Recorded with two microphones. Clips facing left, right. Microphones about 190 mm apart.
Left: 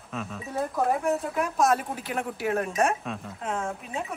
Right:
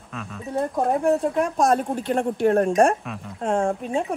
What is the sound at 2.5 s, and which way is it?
Speech, 30° right (ahead or behind).